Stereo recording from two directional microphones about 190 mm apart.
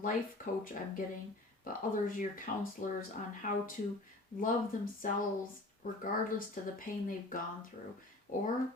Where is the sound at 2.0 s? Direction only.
45° left (ahead or behind).